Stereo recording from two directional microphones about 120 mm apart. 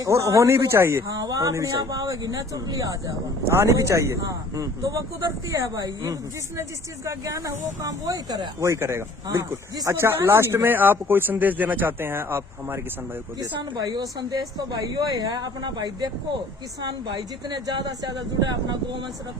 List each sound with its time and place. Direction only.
0.0 s speech: 25° right (ahead or behind)
13.4 s speech: 30° right (ahead or behind)